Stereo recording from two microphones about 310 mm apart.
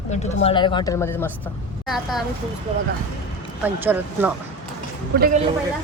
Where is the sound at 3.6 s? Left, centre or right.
Centre.